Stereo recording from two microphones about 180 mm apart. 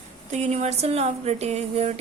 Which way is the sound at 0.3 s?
40° right (ahead or behind).